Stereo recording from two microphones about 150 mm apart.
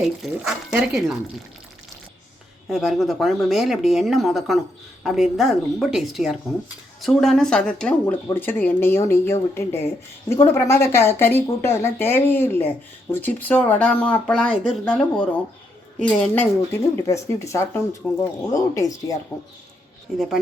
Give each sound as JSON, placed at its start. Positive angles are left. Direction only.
{"t": 0.0, "sound": "speech", "side_deg": 0}
{"t": 2.6, "sound": "speech", "side_deg": 0}
{"t": 17.1, "sound": "speech", "side_deg": 20}
{"t": 20.1, "sound": "speech", "side_deg": 0}